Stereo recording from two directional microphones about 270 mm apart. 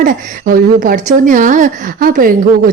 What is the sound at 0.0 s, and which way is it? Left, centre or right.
A woman's voice, right.